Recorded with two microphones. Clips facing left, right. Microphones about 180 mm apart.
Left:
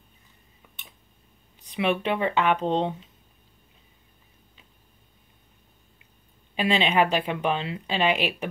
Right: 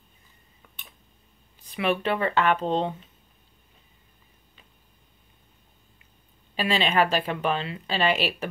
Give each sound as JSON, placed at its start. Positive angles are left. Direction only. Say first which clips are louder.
{"t": 1.7, "sound": "speech", "louder": "even", "side_deg": 20}
{"t": 6.5, "sound": "speech", "louder": "left 1 dB", "side_deg": 15}